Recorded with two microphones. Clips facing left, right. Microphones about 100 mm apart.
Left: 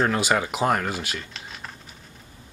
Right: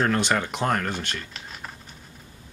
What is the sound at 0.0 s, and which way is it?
Speech, 5° left (ahead or behind).